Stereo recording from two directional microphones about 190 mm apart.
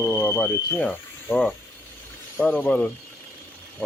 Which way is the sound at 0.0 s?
10° left (ahead or behind).